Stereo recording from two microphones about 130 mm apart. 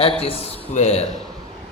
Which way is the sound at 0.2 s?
50° left (ahead or behind).